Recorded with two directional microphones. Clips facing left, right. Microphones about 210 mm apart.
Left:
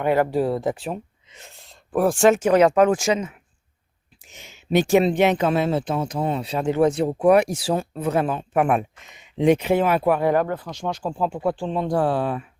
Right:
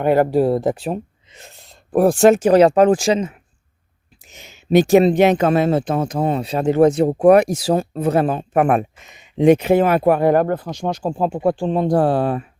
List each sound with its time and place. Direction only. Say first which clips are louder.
0.0 s speech: right 5 dB; 40° right (ahead or behind)